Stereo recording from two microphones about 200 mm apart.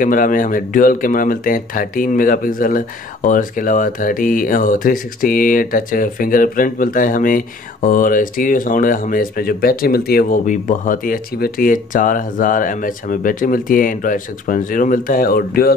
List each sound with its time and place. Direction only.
0.0 s speech: 45° left (ahead or behind)